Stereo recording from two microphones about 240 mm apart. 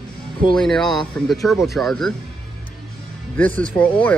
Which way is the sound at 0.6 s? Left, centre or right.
Centre.